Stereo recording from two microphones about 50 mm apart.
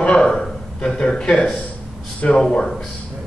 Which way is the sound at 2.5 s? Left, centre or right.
Centre.